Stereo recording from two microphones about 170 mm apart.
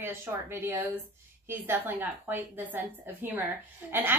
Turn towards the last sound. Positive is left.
turn(degrees=-10)  # may be behind; listen again after turning